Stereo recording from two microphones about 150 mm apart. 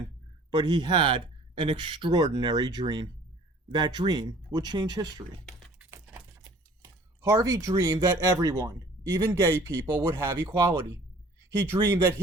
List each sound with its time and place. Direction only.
0.5 s speech: 30° right (ahead or behind)
5.8 s a sound: 15° right (ahead or behind)
7.2 s speech: 20° right (ahead or behind)